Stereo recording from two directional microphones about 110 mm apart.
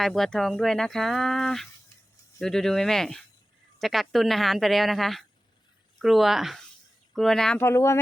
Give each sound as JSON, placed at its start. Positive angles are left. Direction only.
{"t": 0.0, "sound": "speech", "side_deg": 5}
{"t": 7.6, "sound": "speech", "side_deg": 25}